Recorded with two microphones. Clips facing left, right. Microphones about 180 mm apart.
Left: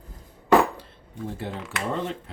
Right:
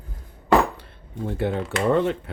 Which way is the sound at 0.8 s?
65° right (ahead or behind).